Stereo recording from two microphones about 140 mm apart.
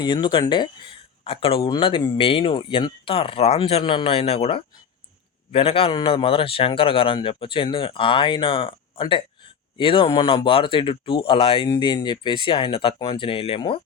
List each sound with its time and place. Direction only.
0.0 s a man's voice: 35° left (ahead or behind)